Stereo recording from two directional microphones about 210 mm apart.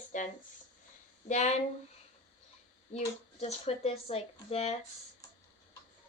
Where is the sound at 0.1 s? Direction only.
35° left (ahead or behind).